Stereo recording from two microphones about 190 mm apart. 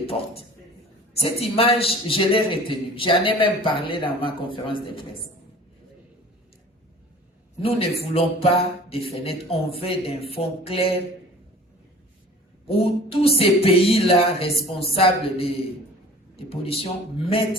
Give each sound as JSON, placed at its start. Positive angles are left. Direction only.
{"t": 0.0, "sound": "a man's voice", "side_deg": 30}
{"t": 7.6, "sound": "speech", "side_deg": 30}
{"t": 12.6, "sound": "a man's voice", "side_deg": 30}